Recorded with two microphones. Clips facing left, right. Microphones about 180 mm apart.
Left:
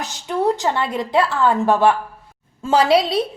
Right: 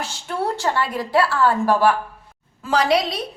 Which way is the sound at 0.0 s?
15° left (ahead or behind).